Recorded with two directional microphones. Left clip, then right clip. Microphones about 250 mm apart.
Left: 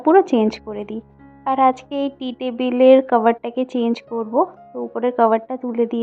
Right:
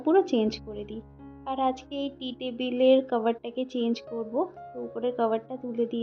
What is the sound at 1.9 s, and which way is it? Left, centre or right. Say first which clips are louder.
Speech: left 10 dB; left.